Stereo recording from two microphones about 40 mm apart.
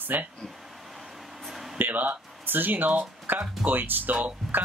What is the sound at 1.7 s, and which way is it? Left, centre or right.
Speech, right.